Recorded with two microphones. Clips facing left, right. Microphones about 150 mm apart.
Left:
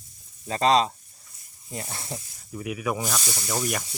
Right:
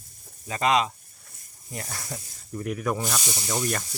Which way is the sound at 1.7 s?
25° left (ahead or behind).